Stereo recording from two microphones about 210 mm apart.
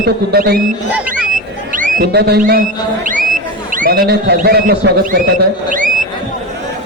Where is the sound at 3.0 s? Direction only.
40° right (ahead or behind).